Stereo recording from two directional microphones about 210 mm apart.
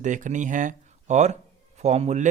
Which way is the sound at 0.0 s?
35° right (ahead or behind).